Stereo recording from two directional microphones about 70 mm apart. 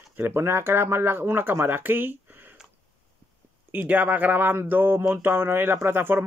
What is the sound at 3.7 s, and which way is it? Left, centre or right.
Speech, right.